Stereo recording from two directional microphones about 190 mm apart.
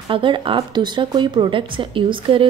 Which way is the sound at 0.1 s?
25° right (ahead or behind).